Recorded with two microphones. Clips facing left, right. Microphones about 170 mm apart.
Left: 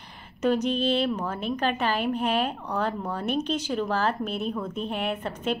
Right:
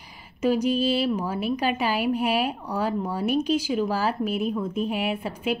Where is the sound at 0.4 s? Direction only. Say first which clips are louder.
Right 2 dB; 10° right (ahead or behind).